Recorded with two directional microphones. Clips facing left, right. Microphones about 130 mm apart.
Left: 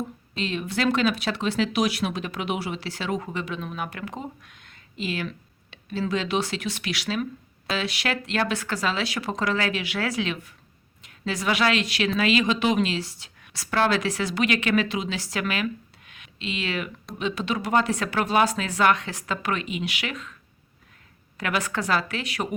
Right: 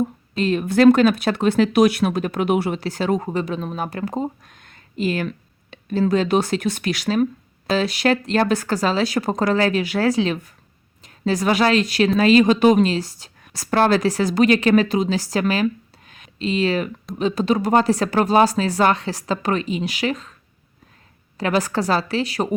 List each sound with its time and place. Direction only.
0.3 s a woman's voice: 45° right (ahead or behind)
21.3 s a woman's voice: 35° right (ahead or behind)